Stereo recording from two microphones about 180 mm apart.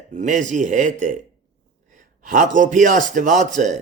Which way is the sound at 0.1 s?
45° right (ahead or behind).